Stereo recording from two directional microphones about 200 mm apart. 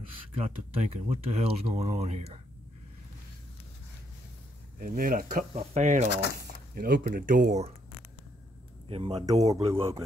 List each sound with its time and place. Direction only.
0.4 s speech: 30° right (ahead or behind)
4.7 s speech: 45° right (ahead or behind)
5.5 s speech: 35° right (ahead or behind)
6.0 s speech: 55° left (ahead or behind)
6.7 s speech: 50° right (ahead or behind)
8.8 s speech: 30° right (ahead or behind)